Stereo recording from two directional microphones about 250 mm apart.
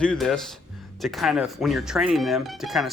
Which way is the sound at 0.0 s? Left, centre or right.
Centre.